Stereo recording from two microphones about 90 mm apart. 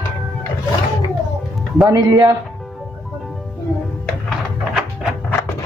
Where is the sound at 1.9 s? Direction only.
40° right (ahead or behind).